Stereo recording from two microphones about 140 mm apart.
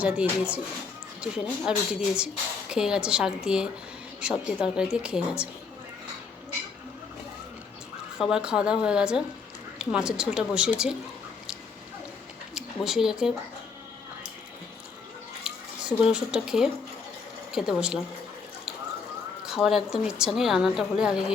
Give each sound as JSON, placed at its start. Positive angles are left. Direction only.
{"t": 0.0, "sound": "a woman's voice", "side_deg": -10}
{"t": 8.2, "sound": "a woman's voice", "side_deg": -5}
{"t": 12.5, "sound": "speech", "side_deg": -5}
{"t": 15.4, "sound": "a woman's voice", "side_deg": -5}
{"t": 19.5, "sound": "a woman's voice", "side_deg": -5}